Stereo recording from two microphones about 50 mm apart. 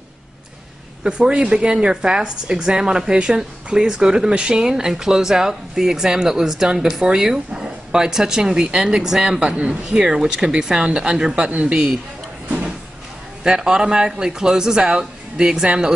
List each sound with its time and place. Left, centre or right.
1.0 s speech: centre
12.4 s a sound: right
13.4 s speech: centre